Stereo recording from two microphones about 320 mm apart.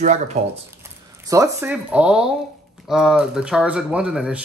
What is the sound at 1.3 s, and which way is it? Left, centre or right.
Speech, centre.